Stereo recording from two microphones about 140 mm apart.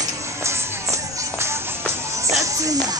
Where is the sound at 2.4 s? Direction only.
25° right (ahead or behind).